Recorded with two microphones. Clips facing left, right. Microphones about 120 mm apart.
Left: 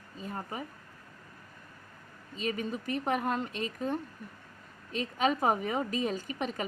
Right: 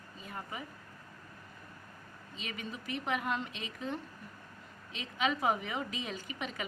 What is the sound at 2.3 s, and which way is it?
A woman's voice, 40° left (ahead or behind).